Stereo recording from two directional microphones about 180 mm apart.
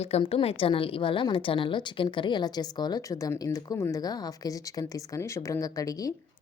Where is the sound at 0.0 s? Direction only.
35° left (ahead or behind).